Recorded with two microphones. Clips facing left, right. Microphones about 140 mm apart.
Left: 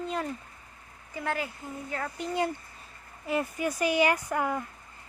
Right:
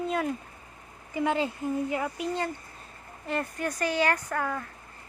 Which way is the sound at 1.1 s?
20° right (ahead or behind).